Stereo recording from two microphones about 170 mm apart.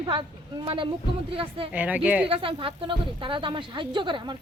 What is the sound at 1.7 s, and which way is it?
Speech, 10° right (ahead or behind).